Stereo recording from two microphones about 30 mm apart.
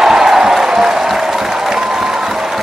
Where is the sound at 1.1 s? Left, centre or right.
Centre.